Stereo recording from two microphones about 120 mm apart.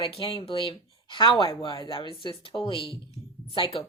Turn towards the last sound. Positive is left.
turn(degrees=45)  # may be behind; listen again after turning